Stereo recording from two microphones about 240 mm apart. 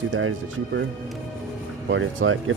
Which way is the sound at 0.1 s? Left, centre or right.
Right.